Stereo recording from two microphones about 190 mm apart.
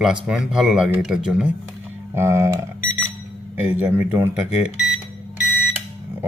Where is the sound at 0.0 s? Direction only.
5° right (ahead or behind).